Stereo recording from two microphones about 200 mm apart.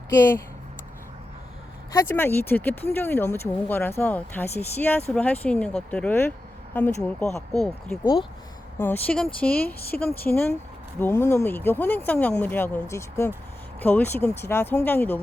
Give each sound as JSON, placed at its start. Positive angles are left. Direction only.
{"t": 0.1, "sound": "speech", "side_deg": 10}
{"t": 2.0, "sound": "speech", "side_deg": 10}
{"t": 8.8, "sound": "speech", "side_deg": 10}